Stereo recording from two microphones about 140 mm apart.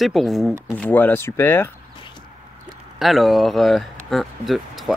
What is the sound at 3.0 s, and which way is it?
Speech, centre (ahead or behind).